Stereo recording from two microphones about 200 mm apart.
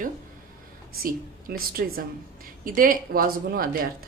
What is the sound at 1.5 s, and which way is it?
Speech, 50° right (ahead or behind).